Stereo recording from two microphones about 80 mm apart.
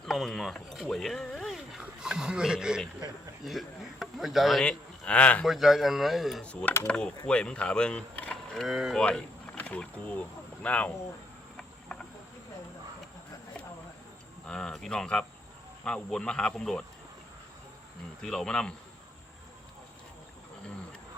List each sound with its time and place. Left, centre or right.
0.0 s speech: centre
4.6 s a man's voice: centre
5.5 s speech: centre
6.4 s speech: centre
8.5 s speech: centre
9.0 s speech: centre
11.5 s insect: centre
14.4 s speech: centre
18.2 s speech: centre